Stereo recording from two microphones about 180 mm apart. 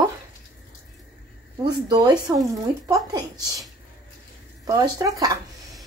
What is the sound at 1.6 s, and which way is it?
Speech, 20° right (ahead or behind).